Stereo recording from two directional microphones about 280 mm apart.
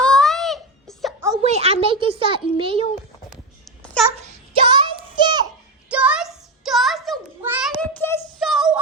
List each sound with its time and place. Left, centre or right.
0.0 s baby cry: centre
1.2 s a sound: centre
1.5 s a child's voice: right
4.6 s child singing: centre
5.9 s a sound: centre
7.8 s child singing: centre